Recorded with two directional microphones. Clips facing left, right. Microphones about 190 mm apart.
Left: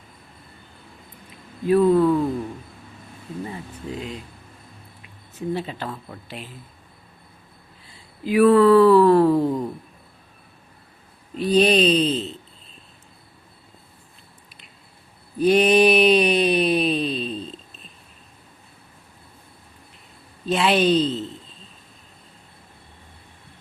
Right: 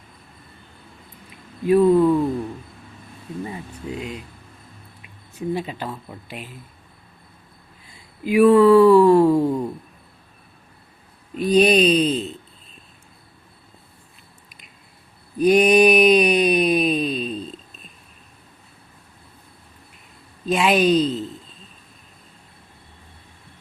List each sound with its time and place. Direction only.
1.6 s speech: 15° right (ahead or behind)
3.9 s speech: 10° right (ahead or behind)
5.3 s speech: 10° right (ahead or behind)
8.2 s speech: 10° right (ahead or behind)
11.3 s speech: 10° right (ahead or behind)
15.4 s a sound: 10° right (ahead or behind)
20.5 s a sound: 10° right (ahead or behind)